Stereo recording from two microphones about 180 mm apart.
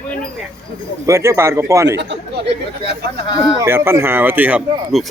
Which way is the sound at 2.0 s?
75° right (ahead or behind).